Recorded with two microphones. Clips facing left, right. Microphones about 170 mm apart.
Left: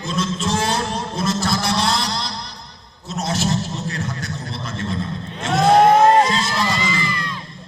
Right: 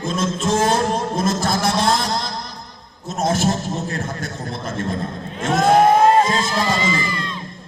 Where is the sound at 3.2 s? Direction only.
50° right (ahead or behind).